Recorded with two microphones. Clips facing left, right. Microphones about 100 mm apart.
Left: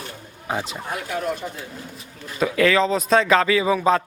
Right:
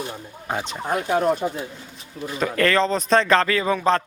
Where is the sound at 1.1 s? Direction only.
40° right (ahead or behind).